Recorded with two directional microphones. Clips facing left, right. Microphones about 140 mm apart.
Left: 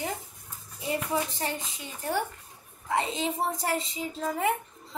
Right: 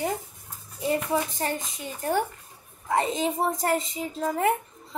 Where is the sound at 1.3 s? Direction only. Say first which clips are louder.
Right 4 dB; 45° right (ahead or behind).